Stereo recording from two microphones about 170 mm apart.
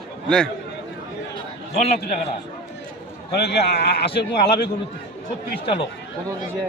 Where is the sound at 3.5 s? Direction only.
75° left (ahead or behind).